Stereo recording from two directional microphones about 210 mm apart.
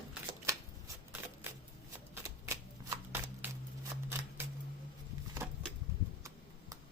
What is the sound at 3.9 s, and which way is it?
Scissors, 15° right (ahead or behind).